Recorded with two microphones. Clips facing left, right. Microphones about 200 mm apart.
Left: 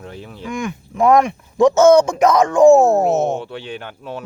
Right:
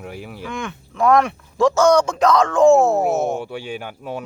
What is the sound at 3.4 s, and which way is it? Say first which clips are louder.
Speech: right 1 dB; 10° right (ahead or behind).